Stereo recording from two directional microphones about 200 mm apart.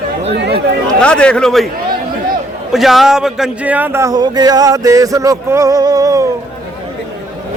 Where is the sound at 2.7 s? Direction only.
Centre (ahead or behind); by 6.2 s 15° right (ahead or behind).